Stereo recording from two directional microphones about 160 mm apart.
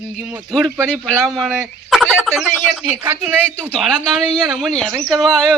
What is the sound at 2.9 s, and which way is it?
Speech, 25° right (ahead or behind).